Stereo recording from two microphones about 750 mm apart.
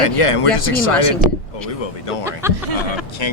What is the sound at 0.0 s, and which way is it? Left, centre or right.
Speech, left.